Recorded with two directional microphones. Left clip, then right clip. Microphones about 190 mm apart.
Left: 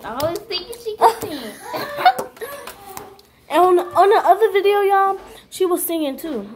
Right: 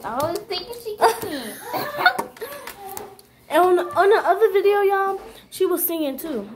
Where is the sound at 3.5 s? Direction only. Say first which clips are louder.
Left 3 dB; 25° left (ahead or behind).